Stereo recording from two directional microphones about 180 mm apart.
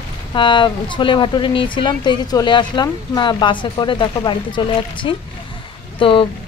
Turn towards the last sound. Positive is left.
turn(degrees=30)  # may be behind; listen again after turning